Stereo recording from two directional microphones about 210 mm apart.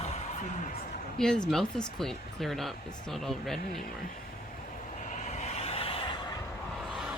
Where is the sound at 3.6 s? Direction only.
45° left (ahead or behind).